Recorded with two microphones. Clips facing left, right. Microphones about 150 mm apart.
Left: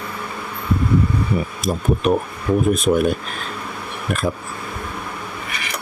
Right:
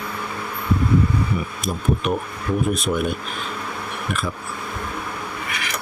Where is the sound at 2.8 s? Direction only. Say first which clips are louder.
Left 6 dB; 40° left (ahead or behind).